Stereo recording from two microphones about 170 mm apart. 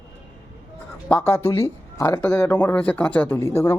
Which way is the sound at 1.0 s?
15° left (ahead or behind).